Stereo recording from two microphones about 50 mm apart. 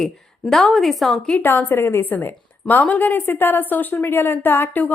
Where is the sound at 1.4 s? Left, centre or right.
Left.